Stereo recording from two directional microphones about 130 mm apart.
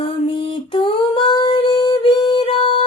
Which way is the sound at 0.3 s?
40° left (ahead or behind).